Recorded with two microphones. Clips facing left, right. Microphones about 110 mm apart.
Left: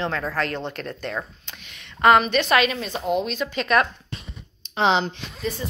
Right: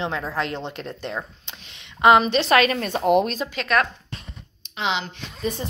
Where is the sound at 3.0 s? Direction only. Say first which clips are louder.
Right 6 dB; 60° right (ahead or behind).